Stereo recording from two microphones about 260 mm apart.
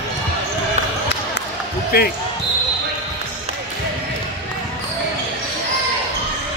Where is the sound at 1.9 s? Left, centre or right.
Left.